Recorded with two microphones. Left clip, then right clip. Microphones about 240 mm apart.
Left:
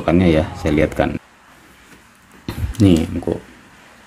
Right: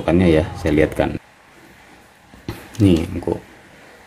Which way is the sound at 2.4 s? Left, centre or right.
Centre.